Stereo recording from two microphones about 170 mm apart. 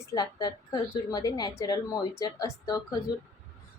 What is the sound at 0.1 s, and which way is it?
A woman's voice, 25° left (ahead or behind).